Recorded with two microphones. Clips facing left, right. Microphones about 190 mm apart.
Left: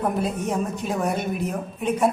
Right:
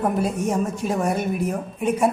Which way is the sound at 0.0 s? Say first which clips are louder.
Right 2 dB; 5° right (ahead or behind).